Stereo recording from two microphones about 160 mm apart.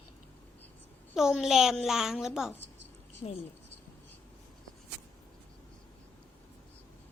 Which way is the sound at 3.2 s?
25° left (ahead or behind).